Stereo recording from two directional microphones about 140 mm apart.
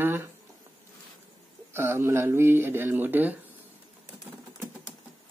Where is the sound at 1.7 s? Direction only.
20° right (ahead or behind).